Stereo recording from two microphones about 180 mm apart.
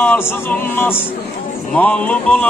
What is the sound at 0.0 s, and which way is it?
Music, 10° left (ahead or behind).